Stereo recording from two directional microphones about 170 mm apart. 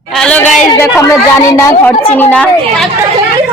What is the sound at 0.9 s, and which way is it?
A woman's voice, 15° left (ahead or behind).